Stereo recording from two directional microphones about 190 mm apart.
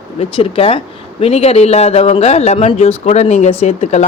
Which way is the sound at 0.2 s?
30° left (ahead or behind).